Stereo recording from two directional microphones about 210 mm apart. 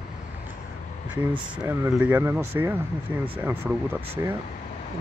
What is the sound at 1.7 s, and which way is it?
Speech, 10° right (ahead or behind).